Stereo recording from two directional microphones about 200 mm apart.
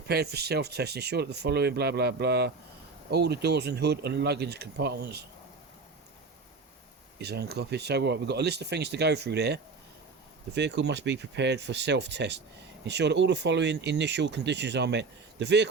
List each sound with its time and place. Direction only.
0.1 s speech: 55° right (ahead or behind)
7.2 s speech: 55° right (ahead or behind)